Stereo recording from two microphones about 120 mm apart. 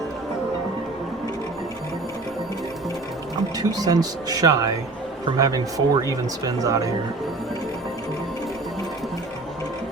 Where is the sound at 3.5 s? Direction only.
35° right (ahead or behind).